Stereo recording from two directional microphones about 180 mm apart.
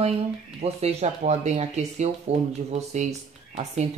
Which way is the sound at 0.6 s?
35° right (ahead or behind).